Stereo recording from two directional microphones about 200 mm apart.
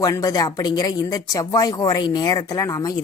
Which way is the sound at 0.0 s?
20° left (ahead or behind).